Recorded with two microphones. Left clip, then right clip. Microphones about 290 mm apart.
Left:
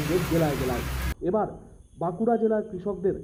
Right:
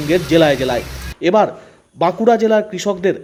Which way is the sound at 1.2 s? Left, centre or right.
Right.